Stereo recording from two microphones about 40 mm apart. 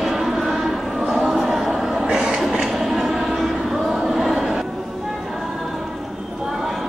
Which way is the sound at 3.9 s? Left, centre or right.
Centre.